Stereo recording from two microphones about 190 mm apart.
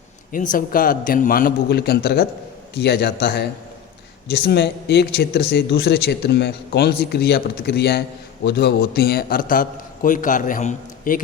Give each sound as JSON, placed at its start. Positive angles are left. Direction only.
{"t": 0.3, "sound": "a man's voice", "side_deg": 45}